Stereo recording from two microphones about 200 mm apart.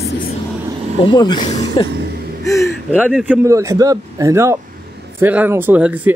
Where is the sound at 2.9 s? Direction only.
5° right (ahead or behind).